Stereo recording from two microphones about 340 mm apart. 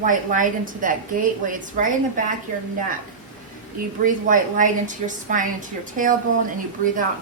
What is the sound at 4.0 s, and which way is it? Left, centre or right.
A woman's voice, right.